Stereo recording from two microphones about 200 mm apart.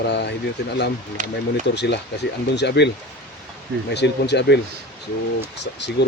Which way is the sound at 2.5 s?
60° left (ahead or behind).